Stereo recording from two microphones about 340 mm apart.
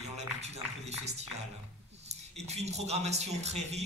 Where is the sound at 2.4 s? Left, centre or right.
Centre.